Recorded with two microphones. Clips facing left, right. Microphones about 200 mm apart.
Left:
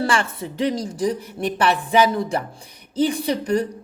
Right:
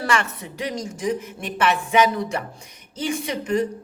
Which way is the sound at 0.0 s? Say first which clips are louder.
Left 2 dB; 30° left (ahead or behind).